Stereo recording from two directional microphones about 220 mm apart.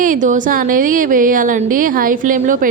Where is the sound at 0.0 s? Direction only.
35° right (ahead or behind).